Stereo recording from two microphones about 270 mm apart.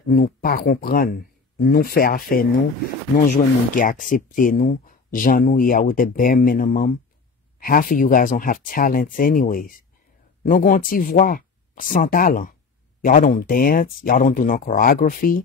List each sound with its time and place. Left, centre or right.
0.1 s speech: left